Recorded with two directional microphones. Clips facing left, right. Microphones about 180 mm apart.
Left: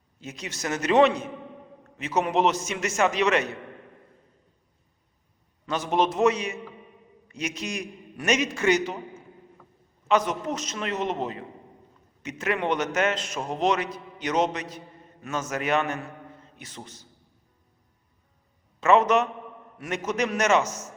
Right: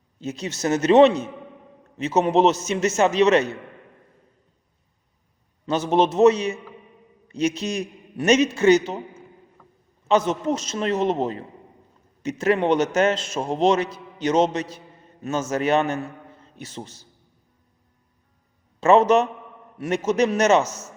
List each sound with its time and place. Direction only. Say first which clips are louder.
0.2 s a man's voice: right 8 dB; 30° right (ahead or behind)
5.6 s a man's voice: right 5 dB; 30° right (ahead or behind)
10.1 s a man's voice: right 4 dB; 30° right (ahead or behind)
18.8 s a man's voice: right 4 dB; 30° right (ahead or behind)